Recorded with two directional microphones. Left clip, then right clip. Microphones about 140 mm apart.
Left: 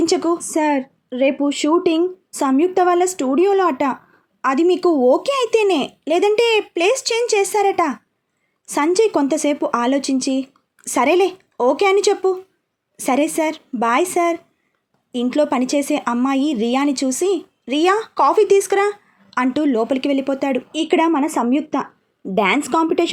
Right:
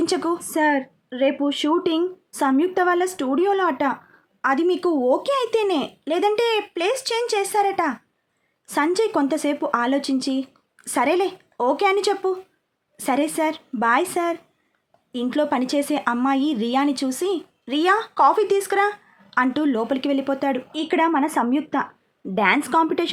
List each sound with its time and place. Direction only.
0.0 s a woman's voice: 10° left (ahead or behind)
0.4 s a woman's voice: 20° left (ahead or behind)